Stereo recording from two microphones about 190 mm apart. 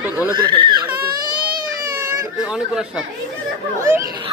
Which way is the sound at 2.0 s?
15° right (ahead or behind).